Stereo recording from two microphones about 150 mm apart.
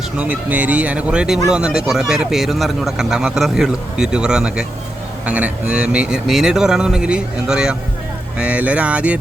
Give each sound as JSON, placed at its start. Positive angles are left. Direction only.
{"t": 0.2, "sound": "speech", "side_deg": -10}